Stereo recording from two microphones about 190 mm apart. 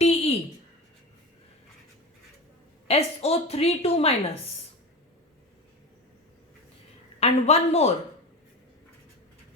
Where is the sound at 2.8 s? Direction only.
30° left (ahead or behind).